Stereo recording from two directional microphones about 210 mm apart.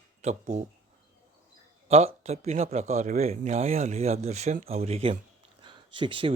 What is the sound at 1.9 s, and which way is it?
Speech, 30° right (ahead or behind).